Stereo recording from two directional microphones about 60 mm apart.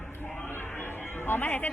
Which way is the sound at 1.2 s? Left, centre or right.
Left.